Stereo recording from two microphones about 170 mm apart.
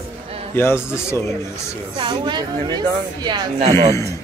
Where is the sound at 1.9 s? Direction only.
25° right (ahead or behind).